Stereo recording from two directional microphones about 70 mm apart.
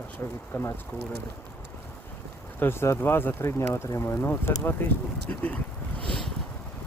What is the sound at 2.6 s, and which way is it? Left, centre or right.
Speech, left.